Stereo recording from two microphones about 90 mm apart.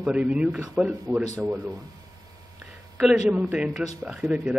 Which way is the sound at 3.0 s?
10° right (ahead or behind).